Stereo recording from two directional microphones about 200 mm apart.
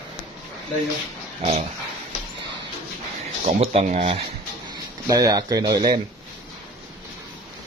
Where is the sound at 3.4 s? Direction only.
30° right (ahead or behind).